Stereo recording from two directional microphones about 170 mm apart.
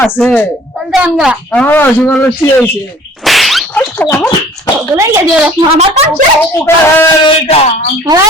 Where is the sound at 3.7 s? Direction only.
10° left (ahead or behind).